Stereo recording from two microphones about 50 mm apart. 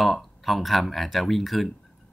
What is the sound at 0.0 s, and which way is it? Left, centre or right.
Speech, centre.